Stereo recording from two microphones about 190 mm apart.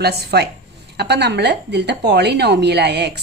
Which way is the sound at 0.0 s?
60° right (ahead or behind).